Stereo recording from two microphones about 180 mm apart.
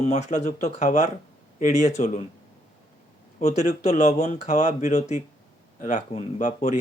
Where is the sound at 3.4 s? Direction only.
40° left (ahead or behind).